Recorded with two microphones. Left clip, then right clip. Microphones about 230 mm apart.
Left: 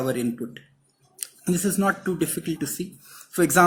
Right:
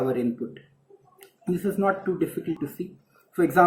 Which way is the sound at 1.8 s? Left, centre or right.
Left.